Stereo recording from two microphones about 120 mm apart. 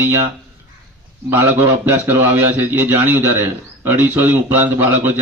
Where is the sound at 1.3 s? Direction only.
20° right (ahead or behind).